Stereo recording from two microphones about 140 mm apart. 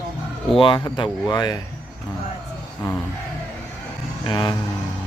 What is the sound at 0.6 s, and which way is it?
Speech, 35° left (ahead or behind).